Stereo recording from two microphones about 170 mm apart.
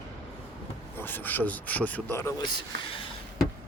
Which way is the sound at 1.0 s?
10° left (ahead or behind).